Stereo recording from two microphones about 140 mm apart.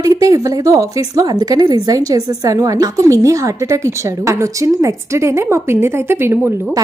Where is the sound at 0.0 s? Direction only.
25° right (ahead or behind).